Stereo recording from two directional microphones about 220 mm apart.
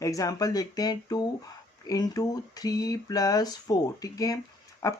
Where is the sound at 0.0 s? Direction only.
15° left (ahead or behind).